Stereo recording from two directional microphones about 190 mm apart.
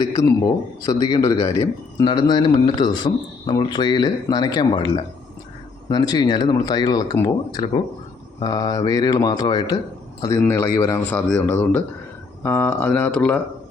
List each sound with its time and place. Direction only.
0.0 s speech: 20° left (ahead or behind)